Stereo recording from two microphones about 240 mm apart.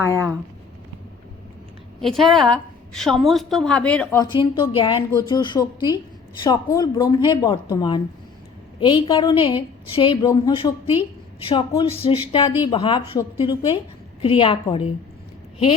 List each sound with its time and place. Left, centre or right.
0.0 s speech: centre
2.0 s a woman's voice: centre; by 14.9 s left